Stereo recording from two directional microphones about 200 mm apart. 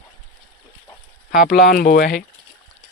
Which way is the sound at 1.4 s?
50° left (ahead or behind).